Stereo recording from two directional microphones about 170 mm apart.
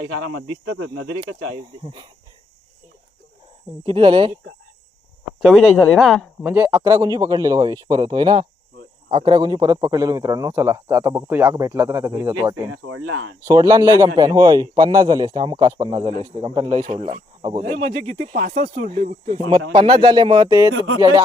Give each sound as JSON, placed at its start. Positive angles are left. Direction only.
{"t": 1.2, "sound": "speech", "side_deg": -30}
{"t": 3.8, "sound": "speech", "side_deg": -30}
{"t": 5.4, "sound": "speech", "side_deg": 0}
{"t": 6.4, "sound": "speech", "side_deg": -10}
{"t": 6.7, "sound": "a man's voice", "side_deg": -25}
{"t": 18.2, "sound": "speech", "side_deg": -45}
{"t": 19.7, "sound": "a man's voice", "side_deg": -30}